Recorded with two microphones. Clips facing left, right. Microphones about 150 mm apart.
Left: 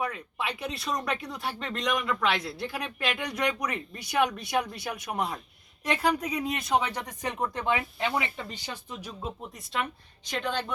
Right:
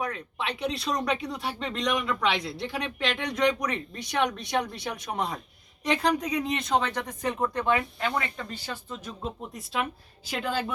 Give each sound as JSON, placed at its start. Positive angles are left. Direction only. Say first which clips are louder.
{"t": 0.0, "sound": "speech", "louder": "even", "side_deg": 5}
{"t": 8.1, "sound": "speech", "louder": "even", "side_deg": 5}
{"t": 8.5, "sound": "speech", "louder": "right 2 dB", "side_deg": 15}
{"t": 9.5, "sound": "speech", "louder": "right 2 dB", "side_deg": 0}